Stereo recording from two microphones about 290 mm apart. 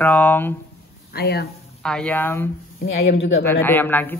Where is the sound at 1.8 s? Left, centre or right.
Centre.